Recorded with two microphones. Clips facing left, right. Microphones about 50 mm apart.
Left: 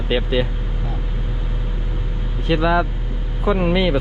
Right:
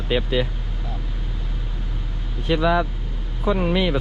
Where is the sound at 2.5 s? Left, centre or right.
Left.